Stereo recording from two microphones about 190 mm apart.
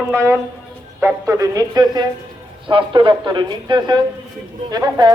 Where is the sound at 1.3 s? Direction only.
20° right (ahead or behind).